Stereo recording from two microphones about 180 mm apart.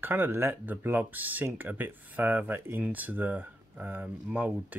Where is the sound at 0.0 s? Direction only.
10° right (ahead or behind).